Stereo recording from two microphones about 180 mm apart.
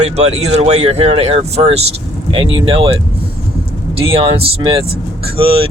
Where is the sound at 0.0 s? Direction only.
35° right (ahead or behind).